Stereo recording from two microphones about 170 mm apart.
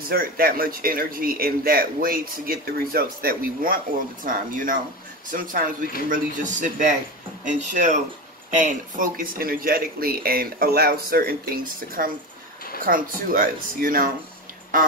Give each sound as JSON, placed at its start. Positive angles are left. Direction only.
{"t": 0.1, "sound": "a man's voice", "side_deg": -60}